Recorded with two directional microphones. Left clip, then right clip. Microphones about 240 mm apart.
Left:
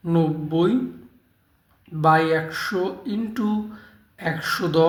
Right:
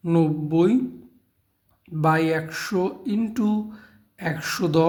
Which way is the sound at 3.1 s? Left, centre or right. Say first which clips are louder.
Right 1 dB; right.